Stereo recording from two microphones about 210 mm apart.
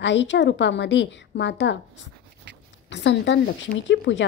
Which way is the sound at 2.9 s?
55° left (ahead or behind).